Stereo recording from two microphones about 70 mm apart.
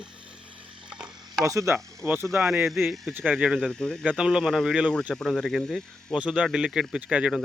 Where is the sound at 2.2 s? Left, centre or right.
Centre.